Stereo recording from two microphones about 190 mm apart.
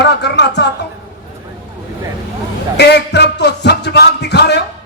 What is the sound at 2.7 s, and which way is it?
A man's voice, 65° left (ahead or behind).